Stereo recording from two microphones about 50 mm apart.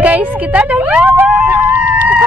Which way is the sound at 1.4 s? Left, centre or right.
Right.